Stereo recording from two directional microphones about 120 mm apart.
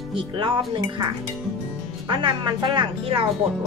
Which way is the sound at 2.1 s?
45° right (ahead or behind).